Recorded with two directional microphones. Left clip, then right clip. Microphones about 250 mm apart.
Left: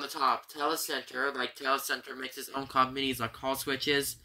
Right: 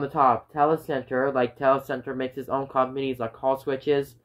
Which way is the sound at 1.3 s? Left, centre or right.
Centre.